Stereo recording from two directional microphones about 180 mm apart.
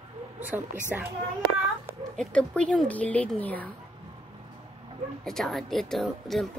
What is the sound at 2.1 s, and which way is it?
Speech, 5° left (ahead or behind).